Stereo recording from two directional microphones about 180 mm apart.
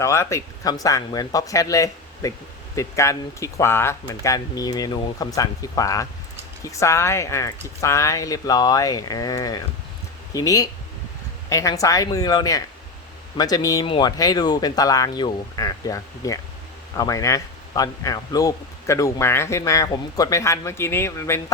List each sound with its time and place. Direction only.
0.0 s speech: 15° left (ahead or behind)